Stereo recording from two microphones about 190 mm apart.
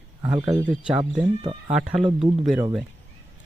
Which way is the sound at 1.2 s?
25° right (ahead or behind).